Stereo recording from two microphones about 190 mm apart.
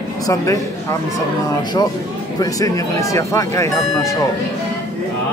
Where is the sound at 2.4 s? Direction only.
15° left (ahead or behind).